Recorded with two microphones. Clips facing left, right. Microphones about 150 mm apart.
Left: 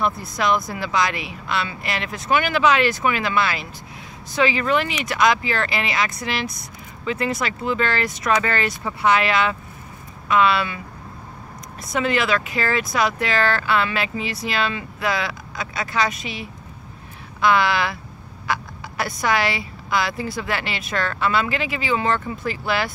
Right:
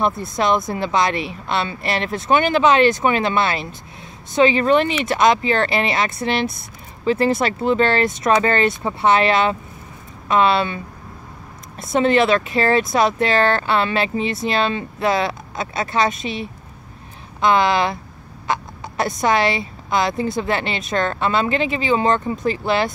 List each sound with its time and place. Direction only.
0.0 s speech: 25° right (ahead or behind)
11.9 s speech: 25° right (ahead or behind)